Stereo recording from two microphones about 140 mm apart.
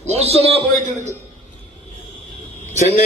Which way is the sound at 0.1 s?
45° right (ahead or behind).